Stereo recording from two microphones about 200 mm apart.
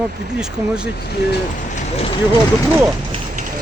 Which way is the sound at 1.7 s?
35° left (ahead or behind).